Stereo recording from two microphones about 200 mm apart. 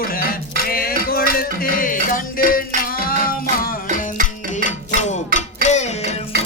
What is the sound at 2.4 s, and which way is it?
Music, 45° left (ahead or behind).